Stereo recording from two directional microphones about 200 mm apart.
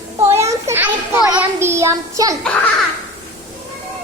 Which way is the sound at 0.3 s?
15° right (ahead or behind).